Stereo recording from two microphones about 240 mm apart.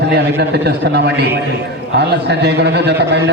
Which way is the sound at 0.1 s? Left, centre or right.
Right.